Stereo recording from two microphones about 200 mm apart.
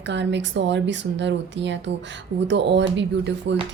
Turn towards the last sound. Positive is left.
turn(degrees=-65)  # may be behind; listen again after turning